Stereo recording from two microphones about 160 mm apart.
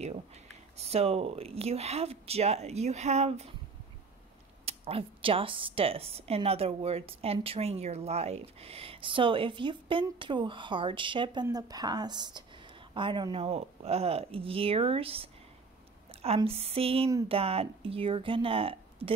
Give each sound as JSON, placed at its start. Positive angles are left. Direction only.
{"t": 0.7, "sound": "speech", "side_deg": -40}
{"t": 4.6, "sound": "a woman's voice", "side_deg": -35}
{"t": 16.1, "sound": "a sound", "side_deg": -40}
{"t": 16.4, "sound": "speech", "side_deg": -35}